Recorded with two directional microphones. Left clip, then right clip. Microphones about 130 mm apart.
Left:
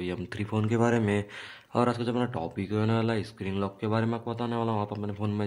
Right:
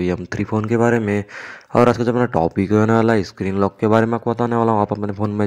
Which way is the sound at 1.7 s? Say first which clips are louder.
Right 12 dB; 50° right (ahead or behind).